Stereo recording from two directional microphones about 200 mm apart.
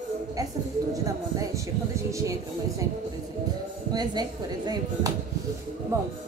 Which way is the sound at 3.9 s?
20° right (ahead or behind).